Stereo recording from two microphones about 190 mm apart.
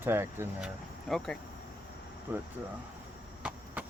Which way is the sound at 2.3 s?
10° right (ahead or behind).